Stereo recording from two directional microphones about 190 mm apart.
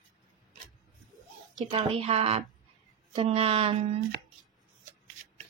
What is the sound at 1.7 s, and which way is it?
Speech, 30° right (ahead or behind).